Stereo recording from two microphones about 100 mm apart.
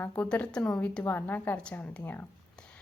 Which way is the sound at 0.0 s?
15° left (ahead or behind).